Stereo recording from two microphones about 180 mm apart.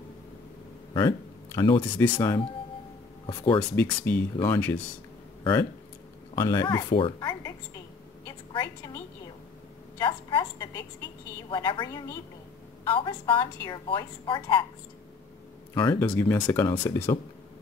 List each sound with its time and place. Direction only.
0.9 s a woman's voice: 20° left (ahead or behind)
3.7 s speech: 10° left (ahead or behind)
6.3 s speech: 20° left (ahead or behind)
8.3 s a sound: 20° left (ahead or behind)
9.9 s a woman's voice: 25° left (ahead or behind)
15.8 s a woman's voice: 20° left (ahead or behind)
16.1 s speech: 10° left (ahead or behind)